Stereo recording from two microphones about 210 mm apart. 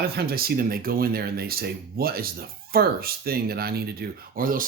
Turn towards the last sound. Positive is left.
turn(degrees=-40)  # may be behind; listen again after turning